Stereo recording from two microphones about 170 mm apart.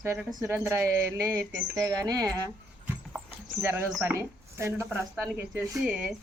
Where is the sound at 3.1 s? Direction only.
10° right (ahead or behind).